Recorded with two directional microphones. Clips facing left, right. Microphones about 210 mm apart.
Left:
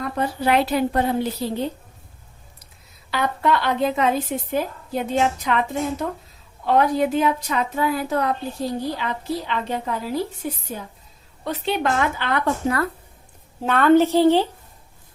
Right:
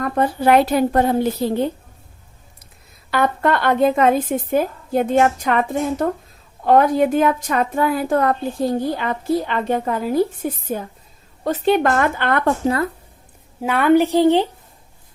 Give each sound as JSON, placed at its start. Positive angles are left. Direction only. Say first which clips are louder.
{"t": 0.0, "sound": "a woman's voice", "louder": "right 5 dB", "side_deg": -50}
{"t": 3.1, "sound": "a woman's voice", "louder": "right 3 dB", "side_deg": -50}
{"t": 12.6, "sound": "speech", "louder": "right 3 dB", "side_deg": -25}
{"t": 13.6, "sound": "a woman's voice", "louder": "right 1 dB", "side_deg": -10}